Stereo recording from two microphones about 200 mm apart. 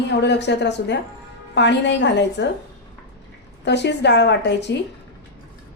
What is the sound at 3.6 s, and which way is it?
A woman's voice, 60° left (ahead or behind).